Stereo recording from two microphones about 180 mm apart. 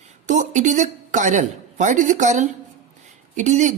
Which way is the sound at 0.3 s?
40° right (ahead or behind).